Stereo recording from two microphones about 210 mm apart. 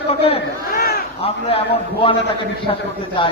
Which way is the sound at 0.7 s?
45° left (ahead or behind).